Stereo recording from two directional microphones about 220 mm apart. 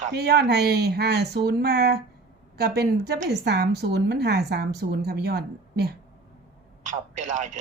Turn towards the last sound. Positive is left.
turn(degrees=-35)  # may be behind; listen again after turning